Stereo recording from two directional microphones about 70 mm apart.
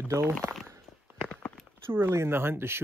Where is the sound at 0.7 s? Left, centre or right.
Right.